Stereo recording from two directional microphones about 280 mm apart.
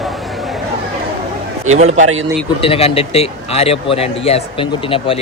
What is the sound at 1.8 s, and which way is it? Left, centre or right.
Speech, right.